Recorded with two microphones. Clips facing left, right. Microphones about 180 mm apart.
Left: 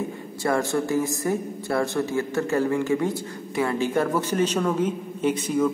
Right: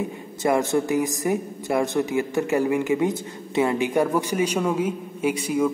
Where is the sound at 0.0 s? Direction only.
20° right (ahead or behind).